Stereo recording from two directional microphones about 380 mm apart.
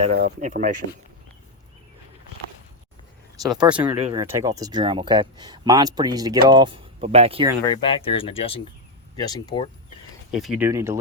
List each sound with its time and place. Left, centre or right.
0.0 s speech: right
3.4 s speech: centre
7.7 s speech: centre
10.3 s speech: centre